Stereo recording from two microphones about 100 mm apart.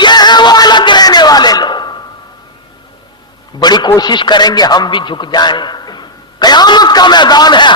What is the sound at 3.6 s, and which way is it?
A man's voice, 45° left (ahead or behind).